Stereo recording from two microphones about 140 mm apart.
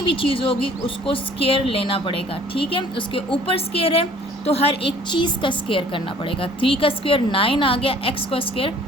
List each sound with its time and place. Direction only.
0.0 s a woman's voice: 40° left (ahead or behind)